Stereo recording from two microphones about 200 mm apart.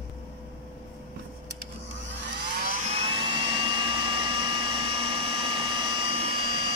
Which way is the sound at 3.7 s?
25° right (ahead or behind).